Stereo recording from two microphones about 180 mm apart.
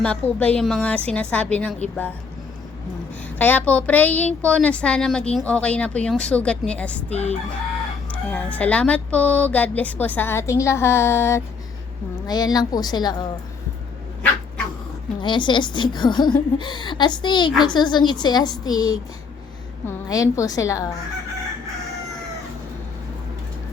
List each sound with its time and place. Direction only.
0.0 s speech: 5° left (ahead or behind)
3.3 s speech: 10° left (ahead or behind)
7.1 s crowing: 35° left (ahead or behind)
8.1 s a woman's voice: 5° left (ahead or behind)
15.2 s a woman's voice: 25° left (ahead or behind)